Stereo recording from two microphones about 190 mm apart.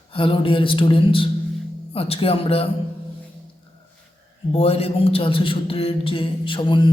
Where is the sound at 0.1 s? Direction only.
30° left (ahead or behind).